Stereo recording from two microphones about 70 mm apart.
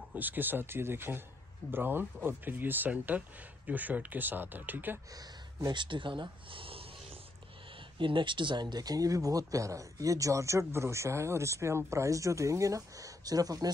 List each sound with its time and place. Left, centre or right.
0.1 s speech: right
5.1 s speech: right
8.5 s speech: right